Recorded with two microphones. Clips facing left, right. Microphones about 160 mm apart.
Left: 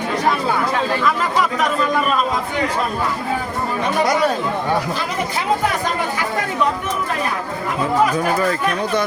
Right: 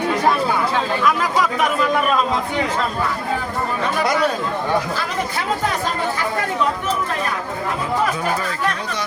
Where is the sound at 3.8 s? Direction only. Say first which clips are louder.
Left 3 dB; 20° left (ahead or behind).